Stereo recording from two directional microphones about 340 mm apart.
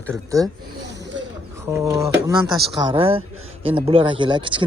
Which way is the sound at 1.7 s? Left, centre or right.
Centre.